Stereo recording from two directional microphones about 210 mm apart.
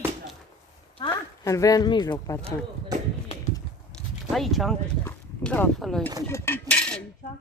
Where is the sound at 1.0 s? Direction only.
15° left (ahead or behind).